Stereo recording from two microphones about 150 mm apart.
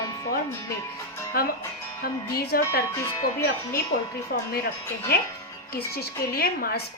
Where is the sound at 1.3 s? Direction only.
90° left.